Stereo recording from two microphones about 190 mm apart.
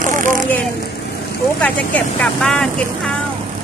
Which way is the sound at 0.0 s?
45° right (ahead or behind).